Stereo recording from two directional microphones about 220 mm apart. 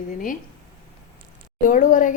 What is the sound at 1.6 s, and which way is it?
Speech, 35° left (ahead or behind).